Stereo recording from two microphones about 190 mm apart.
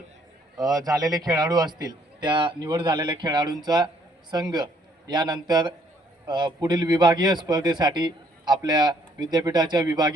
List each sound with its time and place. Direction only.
0.6 s a man's voice: 20° right (ahead or behind)